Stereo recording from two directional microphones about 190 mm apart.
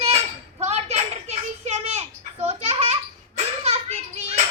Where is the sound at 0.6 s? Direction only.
35° right (ahead or behind).